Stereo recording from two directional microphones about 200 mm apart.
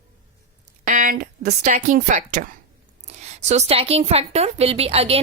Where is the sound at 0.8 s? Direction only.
40° right (ahead or behind).